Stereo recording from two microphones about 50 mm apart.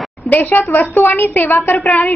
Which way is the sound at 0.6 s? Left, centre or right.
Left.